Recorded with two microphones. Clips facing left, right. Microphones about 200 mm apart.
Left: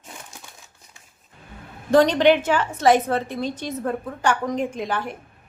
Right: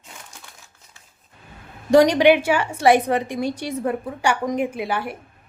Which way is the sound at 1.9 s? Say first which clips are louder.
Right 2 dB; 10° right (ahead or behind).